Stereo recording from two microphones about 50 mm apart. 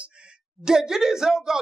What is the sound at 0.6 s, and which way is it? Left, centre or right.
Speech, centre.